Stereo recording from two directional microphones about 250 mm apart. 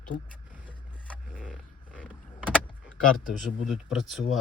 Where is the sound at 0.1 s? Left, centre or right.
Left.